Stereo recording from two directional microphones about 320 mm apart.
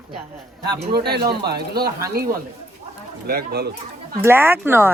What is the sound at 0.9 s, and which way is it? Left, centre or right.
Speech, right.